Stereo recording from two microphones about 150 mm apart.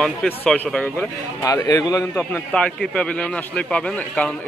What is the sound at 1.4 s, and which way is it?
A man's voice, 20° left (ahead or behind).